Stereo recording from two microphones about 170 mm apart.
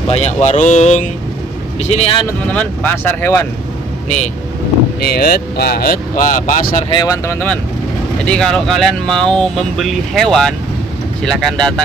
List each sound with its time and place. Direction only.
0.1 s speech: 40° left (ahead or behind)
2.2 s speech: 10° left (ahead or behind)
5.0 s speech: 65° left (ahead or behind)
6.9 s speech: 20° left (ahead or behind)
8.3 s speech: 5° left (ahead or behind)